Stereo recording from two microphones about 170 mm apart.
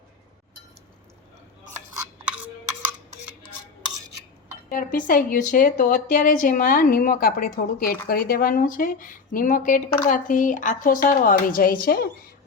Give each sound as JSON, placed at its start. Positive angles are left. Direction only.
{"t": 2.0, "sound": "stir", "side_deg": -5}
{"t": 4.7, "sound": "a woman's voice", "side_deg": 55}